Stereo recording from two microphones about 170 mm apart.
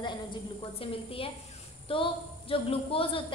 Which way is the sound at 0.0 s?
25° left (ahead or behind).